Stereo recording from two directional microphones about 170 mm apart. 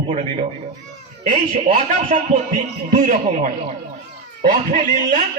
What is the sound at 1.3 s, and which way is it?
A man's voice, 45° right (ahead or behind).